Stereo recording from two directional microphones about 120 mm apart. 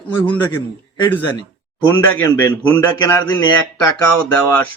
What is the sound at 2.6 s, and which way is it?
Speech, 15° left (ahead or behind).